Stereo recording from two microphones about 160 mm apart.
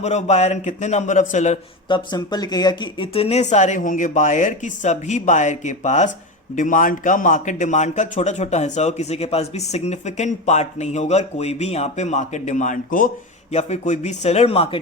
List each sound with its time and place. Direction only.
0.0 s speech: 45° left (ahead or behind)
1.9 s speech: 25° left (ahead or behind); by 13.1 s 55° left (ahead or behind)
13.5 s speech: 45° left (ahead or behind)